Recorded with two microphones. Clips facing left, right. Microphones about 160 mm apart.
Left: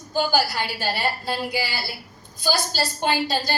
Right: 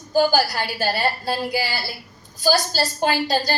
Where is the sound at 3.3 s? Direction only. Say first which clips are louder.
Right 4 dB; 45° right (ahead or behind).